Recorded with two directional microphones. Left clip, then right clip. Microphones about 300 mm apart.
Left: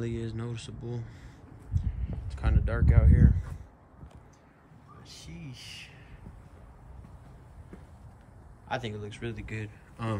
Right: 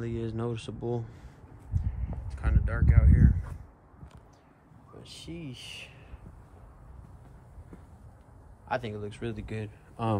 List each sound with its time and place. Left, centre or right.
0.0 s speech: centre
1.8 s speech: centre
5.0 s speech: centre
8.6 s speech: centre